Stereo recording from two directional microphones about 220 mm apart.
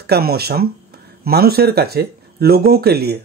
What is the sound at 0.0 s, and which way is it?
A man's voice, 45° right (ahead or behind).